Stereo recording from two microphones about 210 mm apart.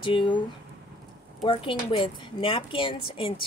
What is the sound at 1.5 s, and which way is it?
A woman's voice, 25° left (ahead or behind).